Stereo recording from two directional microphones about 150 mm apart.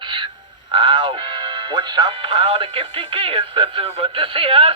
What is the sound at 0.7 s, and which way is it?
Music, 30° right (ahead or behind).